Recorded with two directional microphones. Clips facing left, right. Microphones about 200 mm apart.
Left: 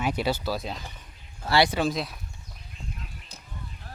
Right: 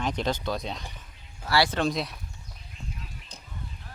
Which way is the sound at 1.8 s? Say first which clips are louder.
Even; centre (ahead or behind).